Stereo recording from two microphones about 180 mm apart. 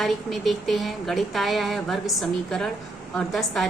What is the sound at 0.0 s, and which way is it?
Speech, centre (ahead or behind).